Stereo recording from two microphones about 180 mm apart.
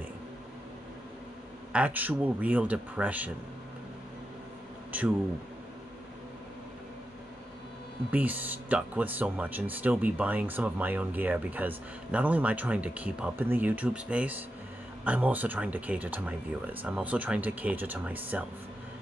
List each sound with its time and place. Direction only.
1.7 s speech: 10° right (ahead or behind)
8.1 s speech: 10° right (ahead or behind)